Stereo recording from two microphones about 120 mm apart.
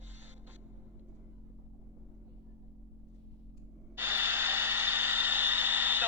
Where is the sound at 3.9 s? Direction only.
15° right (ahead or behind).